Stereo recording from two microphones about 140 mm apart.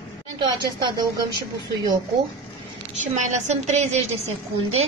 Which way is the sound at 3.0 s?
60° right (ahead or behind).